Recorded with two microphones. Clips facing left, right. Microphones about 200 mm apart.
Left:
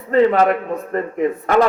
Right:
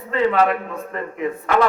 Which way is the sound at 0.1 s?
40° left (ahead or behind).